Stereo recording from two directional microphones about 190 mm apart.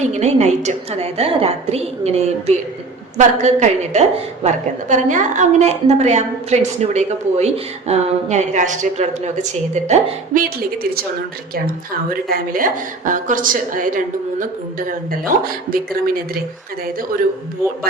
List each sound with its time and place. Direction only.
0.0 s a woman's voice: 35° right (ahead or behind)
12.3 s a woman's voice: 45° right (ahead or behind)